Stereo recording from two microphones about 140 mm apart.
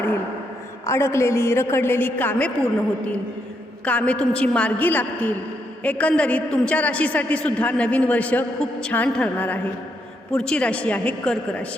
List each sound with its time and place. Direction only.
0.9 s a man's voice: 20° left (ahead or behind)
3.8 s a man's voice: 10° left (ahead or behind)